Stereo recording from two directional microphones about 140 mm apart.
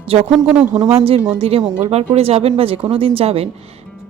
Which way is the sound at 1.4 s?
45° right (ahead or behind).